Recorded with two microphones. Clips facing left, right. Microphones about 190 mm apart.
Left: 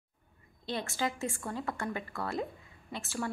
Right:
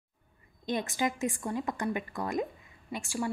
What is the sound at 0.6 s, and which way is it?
A woman's voice, 15° right (ahead or behind).